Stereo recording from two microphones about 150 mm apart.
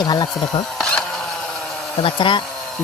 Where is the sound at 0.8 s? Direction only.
5° left (ahead or behind).